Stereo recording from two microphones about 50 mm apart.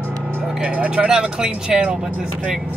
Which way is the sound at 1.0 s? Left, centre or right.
Centre.